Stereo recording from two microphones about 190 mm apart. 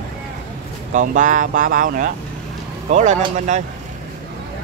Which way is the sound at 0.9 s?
40° right (ahead or behind).